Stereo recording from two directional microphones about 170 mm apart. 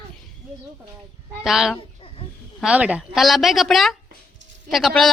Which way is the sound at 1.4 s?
Centre (ahead or behind).